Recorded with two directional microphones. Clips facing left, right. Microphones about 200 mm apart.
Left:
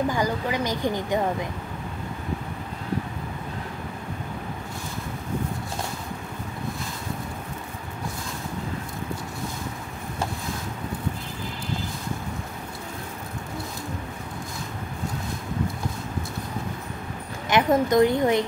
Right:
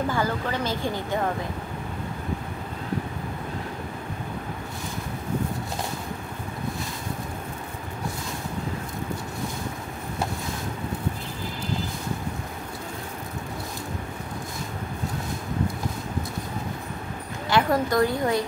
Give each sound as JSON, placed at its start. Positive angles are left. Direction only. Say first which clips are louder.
{"t": 0.1, "sound": "speech", "louder": "left 1 dB", "side_deg": 15}
{"t": 17.5, "sound": "a woman's voice", "louder": "left 2 dB", "side_deg": 20}